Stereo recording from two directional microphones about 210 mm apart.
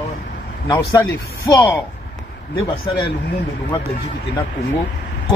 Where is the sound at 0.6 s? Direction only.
15° left (ahead or behind).